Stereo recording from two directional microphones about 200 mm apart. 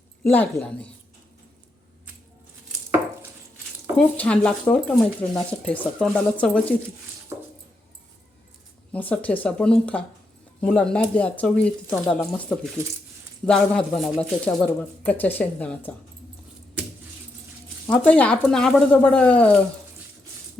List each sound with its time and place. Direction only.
0.3 s speech: 10° left (ahead or behind)
3.9 s speech: 5° left (ahead or behind)
7.3 s a sound: 15° right (ahead or behind)
8.9 s speech: 5° left (ahead or behind)
17.8 s speech: 5° left (ahead or behind)